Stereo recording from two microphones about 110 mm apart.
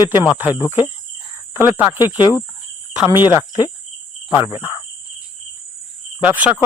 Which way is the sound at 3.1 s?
20° right (ahead or behind).